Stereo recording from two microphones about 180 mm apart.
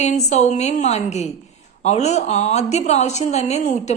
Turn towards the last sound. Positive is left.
turn(degrees=40)  # may be behind; listen again after turning